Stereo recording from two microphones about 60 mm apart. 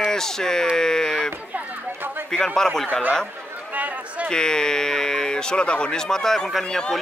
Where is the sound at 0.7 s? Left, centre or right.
Centre.